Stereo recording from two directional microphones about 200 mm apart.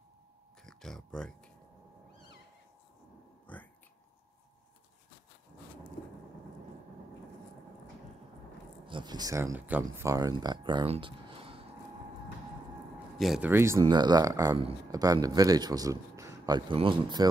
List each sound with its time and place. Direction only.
0.7 s a sound: centre (ahead or behind)
3.5 s whispering: 5° left (ahead or behind)
8.8 s speech: 25° right (ahead or behind)
13.2 s speech: 5° right (ahead or behind); by 17.3 s 25° right (ahead or behind)